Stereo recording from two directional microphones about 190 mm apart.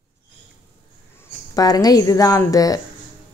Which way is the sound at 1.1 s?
15° left (ahead or behind).